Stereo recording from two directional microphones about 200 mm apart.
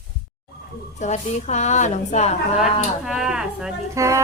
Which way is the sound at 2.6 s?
Centre (ahead or behind).